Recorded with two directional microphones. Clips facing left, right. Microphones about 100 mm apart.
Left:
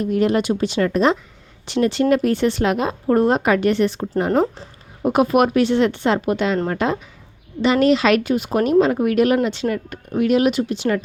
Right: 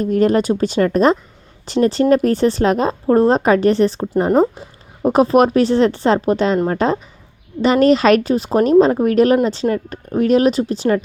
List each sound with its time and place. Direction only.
0.0 s a woman's voice: 40° right (ahead or behind)
5.0 s a woman's voice: 35° right (ahead or behind)